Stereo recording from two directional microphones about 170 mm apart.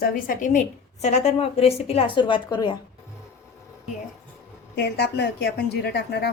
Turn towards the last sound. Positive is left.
turn(degrees=75)  # may be behind; listen again after turning